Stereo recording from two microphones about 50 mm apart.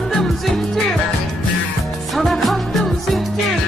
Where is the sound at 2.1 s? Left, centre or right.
Centre.